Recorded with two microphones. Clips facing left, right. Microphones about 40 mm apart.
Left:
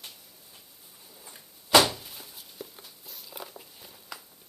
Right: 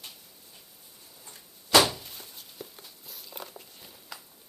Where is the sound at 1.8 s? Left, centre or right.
Centre.